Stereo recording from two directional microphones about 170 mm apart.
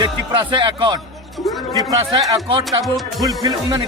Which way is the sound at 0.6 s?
30° right (ahead or behind).